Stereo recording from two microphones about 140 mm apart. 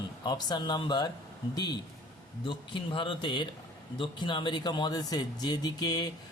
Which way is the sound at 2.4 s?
35° left (ahead or behind).